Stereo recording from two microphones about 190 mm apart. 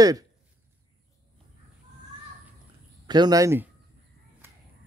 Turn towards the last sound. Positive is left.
turn(degrees=-15)  # may be behind; listen again after turning